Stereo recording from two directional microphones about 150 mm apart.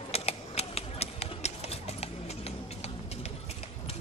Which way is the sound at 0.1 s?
45° left (ahead or behind).